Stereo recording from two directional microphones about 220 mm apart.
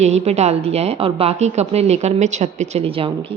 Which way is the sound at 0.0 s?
30° right (ahead or behind).